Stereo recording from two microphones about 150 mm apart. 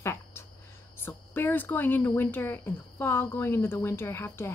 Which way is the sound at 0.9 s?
15° left (ahead or behind).